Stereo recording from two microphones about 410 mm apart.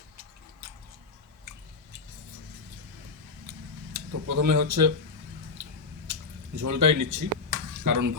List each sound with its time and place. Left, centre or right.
3.9 s speech: right
6.1 s drip: right
6.6 s speech: right